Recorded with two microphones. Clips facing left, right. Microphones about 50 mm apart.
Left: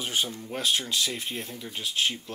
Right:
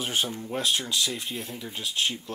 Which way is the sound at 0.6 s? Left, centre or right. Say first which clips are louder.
Even; left.